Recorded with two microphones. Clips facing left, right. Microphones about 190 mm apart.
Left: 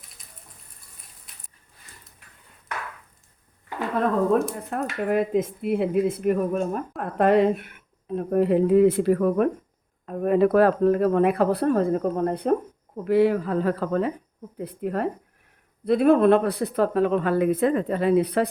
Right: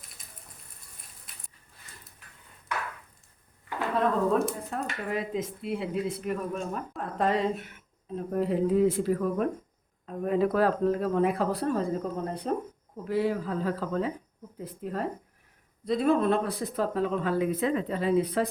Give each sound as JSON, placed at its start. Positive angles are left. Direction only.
{"t": 4.7, "sound": "speech", "side_deg": 60}